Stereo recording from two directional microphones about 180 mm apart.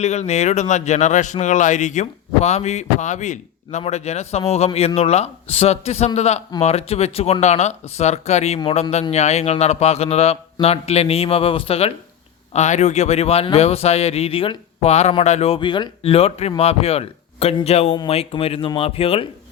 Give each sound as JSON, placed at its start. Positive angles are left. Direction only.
{"t": 0.0, "sound": "speech", "side_deg": 40}